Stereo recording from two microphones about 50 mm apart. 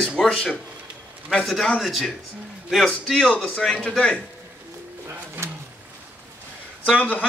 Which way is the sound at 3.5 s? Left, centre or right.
Centre.